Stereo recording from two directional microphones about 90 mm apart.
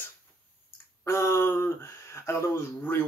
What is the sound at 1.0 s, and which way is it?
Speech, 30° left (ahead or behind).